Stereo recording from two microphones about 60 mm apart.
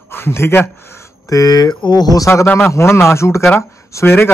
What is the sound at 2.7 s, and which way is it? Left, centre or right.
Speech, left.